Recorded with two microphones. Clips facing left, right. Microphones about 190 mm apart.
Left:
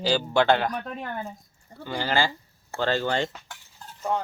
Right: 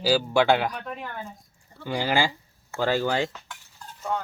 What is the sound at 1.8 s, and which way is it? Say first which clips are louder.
Speech: right 1 dB; 15° right (ahead or behind).